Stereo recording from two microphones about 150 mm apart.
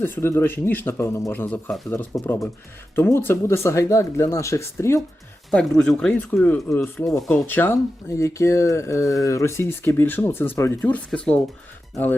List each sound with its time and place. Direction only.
0.0 s speech: 15° left (ahead or behind)
5.5 s speech: 5° left (ahead or behind)
7.2 s speech: centre (ahead or behind)
7.4 s speech: 15° left (ahead or behind)